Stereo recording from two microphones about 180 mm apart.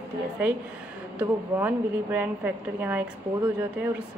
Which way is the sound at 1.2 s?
10° right (ahead or behind).